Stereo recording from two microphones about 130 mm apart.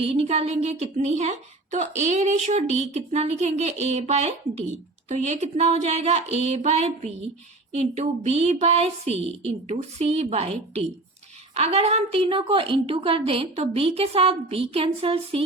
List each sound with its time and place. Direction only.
0.0 s a woman's voice: 50° right (ahead or behind)